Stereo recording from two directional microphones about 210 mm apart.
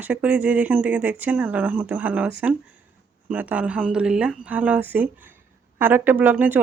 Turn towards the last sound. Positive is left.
turn(degrees=-10)  # may be behind; listen again after turning